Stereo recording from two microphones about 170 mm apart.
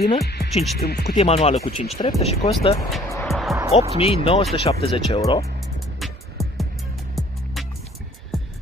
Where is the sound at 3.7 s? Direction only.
30° left (ahead or behind).